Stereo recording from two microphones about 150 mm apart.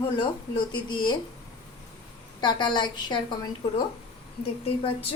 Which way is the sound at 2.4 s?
30° left (ahead or behind).